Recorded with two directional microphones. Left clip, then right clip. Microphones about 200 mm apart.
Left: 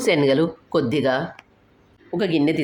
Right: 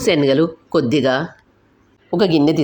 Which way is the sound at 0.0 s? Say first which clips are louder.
Right 3 dB; 15° right (ahead or behind).